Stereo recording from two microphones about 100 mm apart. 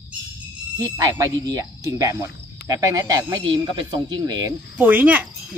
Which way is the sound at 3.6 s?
50° right (ahead or behind).